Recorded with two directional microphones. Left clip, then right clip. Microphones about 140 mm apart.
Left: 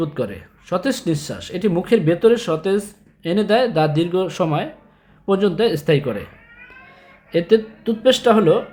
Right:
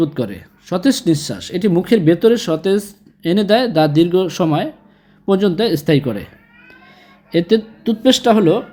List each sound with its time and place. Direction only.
0.0 s speech: 25° right (ahead or behind)